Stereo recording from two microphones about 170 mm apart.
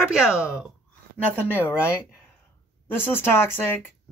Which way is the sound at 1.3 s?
10° left (ahead or behind).